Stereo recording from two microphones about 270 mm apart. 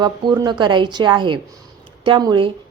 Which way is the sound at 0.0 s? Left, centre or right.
Centre.